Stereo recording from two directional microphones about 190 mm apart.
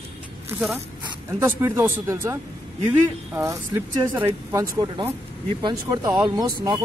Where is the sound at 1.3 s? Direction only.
10° right (ahead or behind).